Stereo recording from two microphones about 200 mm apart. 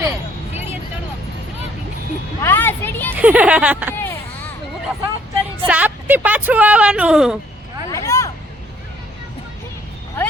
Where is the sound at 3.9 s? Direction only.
10° left (ahead or behind).